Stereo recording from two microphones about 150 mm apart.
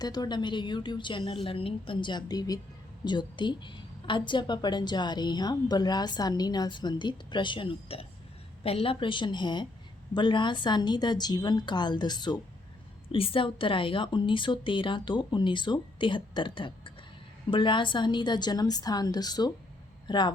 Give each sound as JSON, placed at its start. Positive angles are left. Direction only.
{"t": 0.0, "sound": "a woman's voice", "side_deg": 25}